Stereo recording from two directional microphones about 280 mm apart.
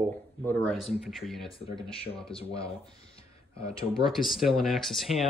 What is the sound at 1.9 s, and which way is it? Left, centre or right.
Speech, centre.